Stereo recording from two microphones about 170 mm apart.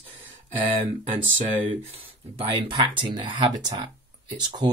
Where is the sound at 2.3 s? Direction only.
30° right (ahead or behind).